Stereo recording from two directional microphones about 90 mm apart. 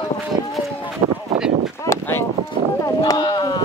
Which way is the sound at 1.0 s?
90° right.